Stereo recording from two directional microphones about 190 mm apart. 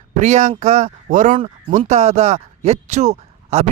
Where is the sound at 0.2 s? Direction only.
40° right (ahead or behind).